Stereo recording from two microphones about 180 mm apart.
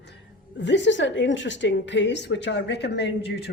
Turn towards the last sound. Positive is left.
turn(degrees=70)  # may be behind; listen again after turning